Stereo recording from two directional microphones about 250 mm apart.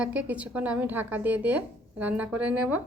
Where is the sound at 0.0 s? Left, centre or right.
Centre.